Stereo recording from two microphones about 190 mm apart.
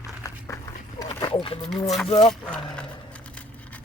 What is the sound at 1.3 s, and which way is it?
Wild animals, 30° left (ahead or behind).